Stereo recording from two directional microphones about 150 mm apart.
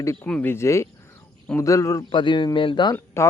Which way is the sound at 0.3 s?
10° left (ahead or behind).